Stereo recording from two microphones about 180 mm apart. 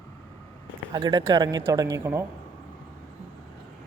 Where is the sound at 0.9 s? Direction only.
25° right (ahead or behind).